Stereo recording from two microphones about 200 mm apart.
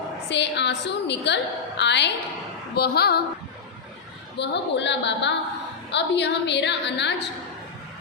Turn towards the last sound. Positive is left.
turn(degrees=60)  # may be behind; listen again after turning